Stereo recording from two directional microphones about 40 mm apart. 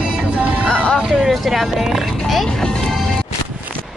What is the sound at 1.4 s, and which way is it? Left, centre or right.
Speech, centre.